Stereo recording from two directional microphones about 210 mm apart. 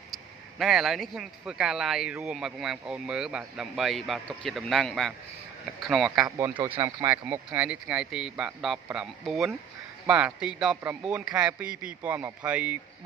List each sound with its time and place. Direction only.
0.1 s speech: centre (ahead or behind)
6.2 s speech: 15° right (ahead or behind)